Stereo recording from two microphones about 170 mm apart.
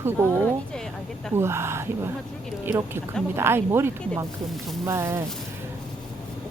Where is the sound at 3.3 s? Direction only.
15° right (ahead or behind).